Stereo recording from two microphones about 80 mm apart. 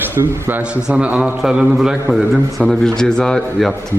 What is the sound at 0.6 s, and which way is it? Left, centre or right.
A man's voice, centre.